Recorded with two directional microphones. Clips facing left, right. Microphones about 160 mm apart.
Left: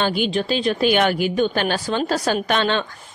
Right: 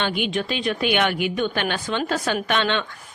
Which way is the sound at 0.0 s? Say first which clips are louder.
Left 3 dB; 35° left (ahead or behind).